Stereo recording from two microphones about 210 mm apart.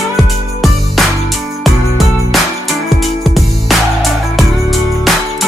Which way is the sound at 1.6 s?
Centre (ahead or behind).